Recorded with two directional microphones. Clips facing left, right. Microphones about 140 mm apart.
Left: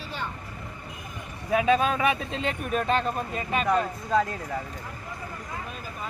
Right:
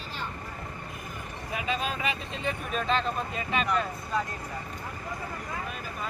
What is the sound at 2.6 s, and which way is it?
Speech, 50° left (ahead or behind).